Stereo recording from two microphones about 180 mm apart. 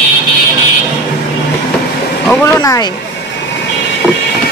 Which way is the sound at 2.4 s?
15° left (ahead or behind).